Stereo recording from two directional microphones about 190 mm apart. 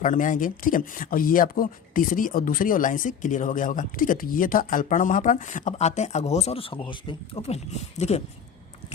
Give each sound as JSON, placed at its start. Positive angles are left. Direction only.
{"t": 0.0, "sound": "speech", "side_deg": 40}